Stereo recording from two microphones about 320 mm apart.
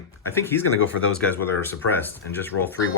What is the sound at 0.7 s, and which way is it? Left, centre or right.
Speech, left.